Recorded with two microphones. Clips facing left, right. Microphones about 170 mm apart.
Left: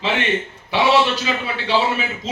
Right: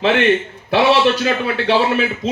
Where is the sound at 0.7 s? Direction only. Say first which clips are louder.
Right 3 dB; 60° right (ahead or behind).